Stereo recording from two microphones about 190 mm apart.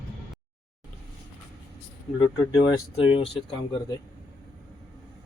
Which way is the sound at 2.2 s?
20° left (ahead or behind).